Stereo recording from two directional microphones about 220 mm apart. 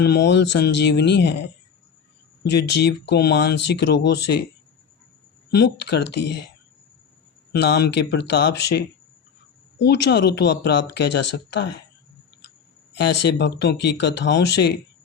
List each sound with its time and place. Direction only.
0.0 s speech: 50° left (ahead or behind)
5.5 s speech: 50° left (ahead or behind)
7.5 s speech: 50° left (ahead or behind)
13.0 s speech: 50° left (ahead or behind)